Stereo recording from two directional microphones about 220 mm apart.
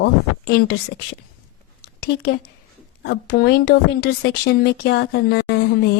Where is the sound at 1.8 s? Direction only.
45° left (ahead or behind).